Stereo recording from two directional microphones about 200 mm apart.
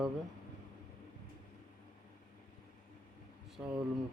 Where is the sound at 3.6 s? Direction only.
10° right (ahead or behind).